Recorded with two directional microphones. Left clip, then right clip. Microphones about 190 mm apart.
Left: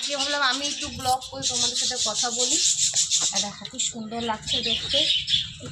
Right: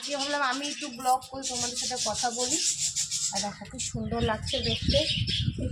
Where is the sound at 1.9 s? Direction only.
10° right (ahead or behind).